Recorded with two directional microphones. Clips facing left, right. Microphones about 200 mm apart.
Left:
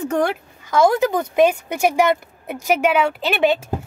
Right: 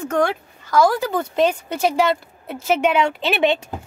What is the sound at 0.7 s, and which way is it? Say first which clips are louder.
Speech: left 2 dB; 20° left (ahead or behind).